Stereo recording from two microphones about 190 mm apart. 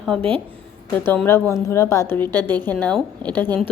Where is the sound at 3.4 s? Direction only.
20° right (ahead or behind).